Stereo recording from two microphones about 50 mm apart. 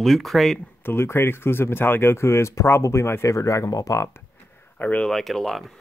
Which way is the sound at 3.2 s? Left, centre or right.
Left.